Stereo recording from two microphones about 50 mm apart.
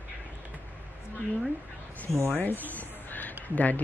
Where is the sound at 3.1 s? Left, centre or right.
Left.